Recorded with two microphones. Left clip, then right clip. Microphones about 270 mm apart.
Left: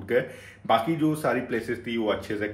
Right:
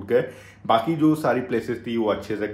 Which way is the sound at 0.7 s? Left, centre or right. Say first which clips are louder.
Right 4 dB; right.